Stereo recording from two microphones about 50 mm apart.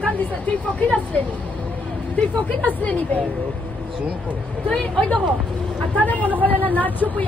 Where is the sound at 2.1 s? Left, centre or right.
Left.